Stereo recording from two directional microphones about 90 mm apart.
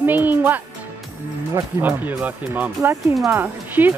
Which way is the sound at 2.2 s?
20° right (ahead or behind).